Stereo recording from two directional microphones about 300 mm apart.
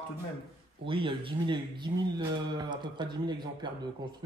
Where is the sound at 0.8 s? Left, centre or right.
Centre.